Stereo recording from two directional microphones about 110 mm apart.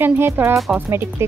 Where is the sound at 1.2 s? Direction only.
25° right (ahead or behind).